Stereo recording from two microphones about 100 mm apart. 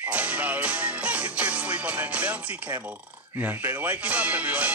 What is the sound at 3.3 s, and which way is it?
Speech, 20° right (ahead or behind).